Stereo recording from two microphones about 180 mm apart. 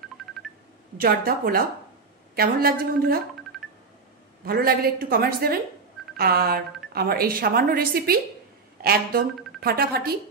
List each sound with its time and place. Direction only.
0.2 s telephone dialing: centre (ahead or behind)
0.9 s a woman's voice: 55° right (ahead or behind)
4.5 s a woman's voice: 55° right (ahead or behind)
9.6 s a woman's voice: 55° right (ahead or behind)